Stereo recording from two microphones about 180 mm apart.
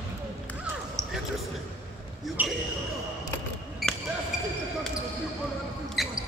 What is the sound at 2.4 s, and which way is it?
Basketball bounce, 10° right (ahead or behind).